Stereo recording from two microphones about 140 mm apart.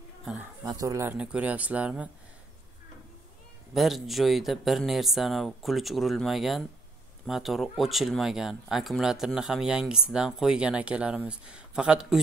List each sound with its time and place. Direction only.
0.7 s speech: 25° right (ahead or behind)
1.1 s speech: 10° right (ahead or behind)
3.7 s speech: centre (ahead or behind)